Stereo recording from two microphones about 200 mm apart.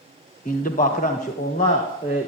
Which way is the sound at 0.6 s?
45° left (ahead or behind).